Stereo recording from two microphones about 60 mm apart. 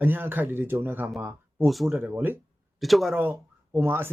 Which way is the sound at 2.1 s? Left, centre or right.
Right.